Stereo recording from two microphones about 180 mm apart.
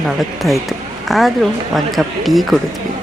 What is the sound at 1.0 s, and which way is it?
A woman's voice, centre (ahead or behind).